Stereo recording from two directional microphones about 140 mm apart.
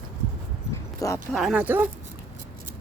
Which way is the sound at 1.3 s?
5° right (ahead or behind).